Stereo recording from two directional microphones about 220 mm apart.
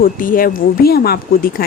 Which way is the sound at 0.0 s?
40° left (ahead or behind).